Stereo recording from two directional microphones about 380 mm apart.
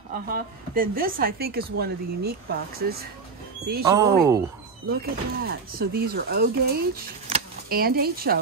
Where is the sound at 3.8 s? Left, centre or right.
Centre.